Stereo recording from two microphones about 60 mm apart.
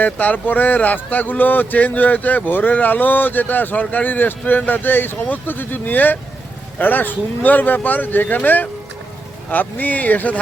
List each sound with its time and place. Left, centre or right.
0.0 s speech: left